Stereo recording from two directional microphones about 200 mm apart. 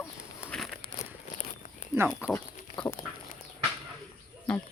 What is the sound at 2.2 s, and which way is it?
Speech, 5° right (ahead or behind).